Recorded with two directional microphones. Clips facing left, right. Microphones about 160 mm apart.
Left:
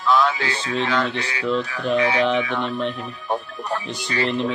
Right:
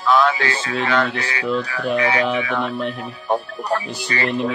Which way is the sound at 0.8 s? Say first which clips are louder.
Right 4 dB; 65° right (ahead or behind).